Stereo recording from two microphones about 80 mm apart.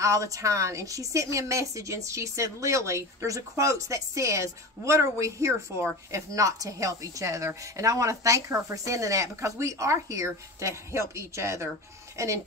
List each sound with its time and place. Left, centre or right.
0.0 s a woman's voice: right